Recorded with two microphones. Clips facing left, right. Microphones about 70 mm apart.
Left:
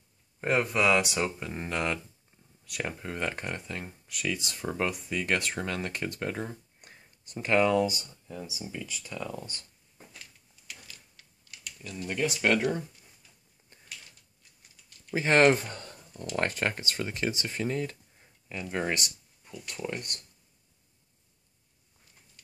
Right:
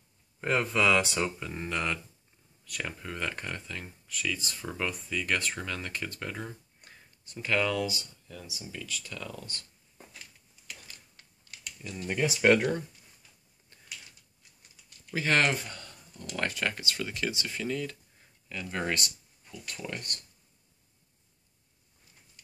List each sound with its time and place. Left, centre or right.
0.4 s speech: left
11.8 s speech: centre
15.1 s speech: left